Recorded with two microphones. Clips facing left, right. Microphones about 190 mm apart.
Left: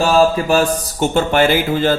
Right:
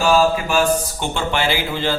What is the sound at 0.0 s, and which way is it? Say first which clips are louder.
Speech: left 3 dB; 35° left (ahead or behind).